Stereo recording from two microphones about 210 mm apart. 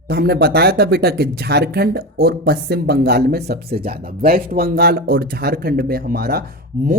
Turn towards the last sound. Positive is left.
turn(degrees=-45)  # may be behind; listen again after turning